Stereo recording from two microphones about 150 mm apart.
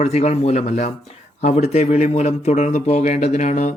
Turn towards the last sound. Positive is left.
turn(degrees=50)  # may be behind; listen again after turning